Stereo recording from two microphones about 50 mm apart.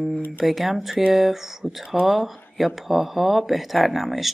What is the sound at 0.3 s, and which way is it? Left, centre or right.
A woman's voice, centre.